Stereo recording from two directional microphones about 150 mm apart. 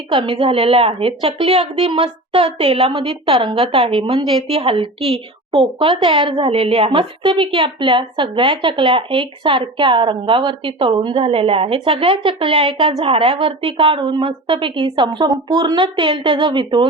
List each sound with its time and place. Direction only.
0.1 s a woman's voice: 35° right (ahead or behind)